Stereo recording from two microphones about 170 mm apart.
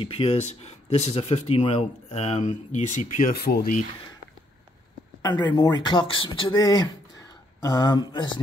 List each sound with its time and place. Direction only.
0.0 s speech: 35° left (ahead or behind); by 3.6 s 65° left (ahead or behind)
5.2 s speech: 25° left (ahead or behind)